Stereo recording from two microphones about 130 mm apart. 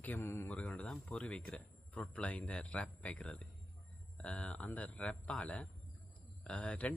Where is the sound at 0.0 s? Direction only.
15° left (ahead or behind).